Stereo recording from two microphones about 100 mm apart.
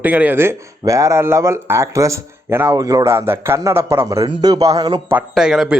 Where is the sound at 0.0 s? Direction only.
20° right (ahead or behind); by 4.9 s 35° right (ahead or behind).